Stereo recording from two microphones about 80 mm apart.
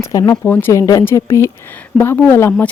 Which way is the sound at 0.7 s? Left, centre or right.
Left.